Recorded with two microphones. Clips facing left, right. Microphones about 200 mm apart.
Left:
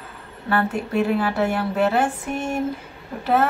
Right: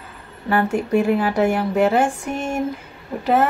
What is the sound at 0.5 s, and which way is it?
A woman's voice, 15° right (ahead or behind).